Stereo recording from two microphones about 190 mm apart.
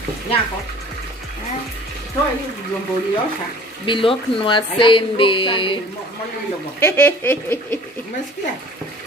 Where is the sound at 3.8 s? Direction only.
25° left (ahead or behind).